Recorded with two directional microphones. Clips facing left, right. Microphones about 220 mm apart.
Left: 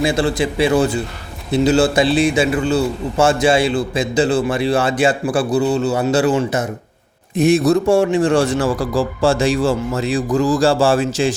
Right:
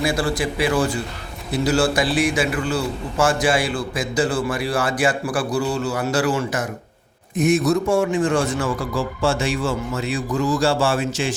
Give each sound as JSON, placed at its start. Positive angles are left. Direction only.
{"t": 0.0, "sound": "a man's voice", "side_deg": 25}